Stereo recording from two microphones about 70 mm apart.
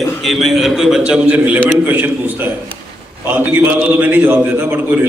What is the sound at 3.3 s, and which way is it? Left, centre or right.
A man's voice, right.